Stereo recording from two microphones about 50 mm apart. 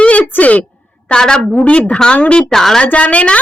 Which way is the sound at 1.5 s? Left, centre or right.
Left.